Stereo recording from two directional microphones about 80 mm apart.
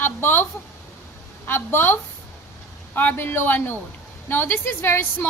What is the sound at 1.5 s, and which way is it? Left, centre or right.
A woman's voice, left.